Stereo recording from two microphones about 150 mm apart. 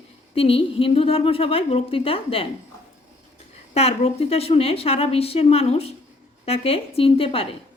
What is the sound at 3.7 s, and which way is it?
Speech, 45° left (ahead or behind).